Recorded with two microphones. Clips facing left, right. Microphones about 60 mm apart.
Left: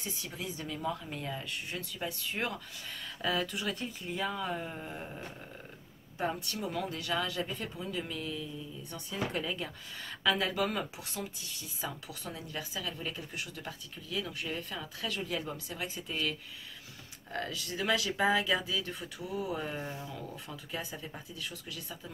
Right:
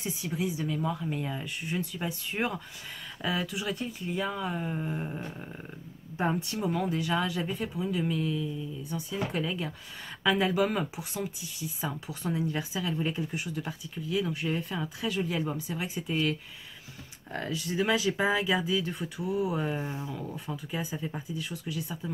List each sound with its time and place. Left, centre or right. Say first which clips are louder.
0.0 s a woman's voice: right 8 dB; centre
12.1 s a woman's voice: right 10 dB; right
19.9 s speech: right 5 dB; right
20.2 s a woman's voice: right 6 dB; centre